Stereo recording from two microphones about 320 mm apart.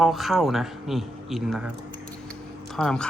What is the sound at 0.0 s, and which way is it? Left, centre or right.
Speech, centre.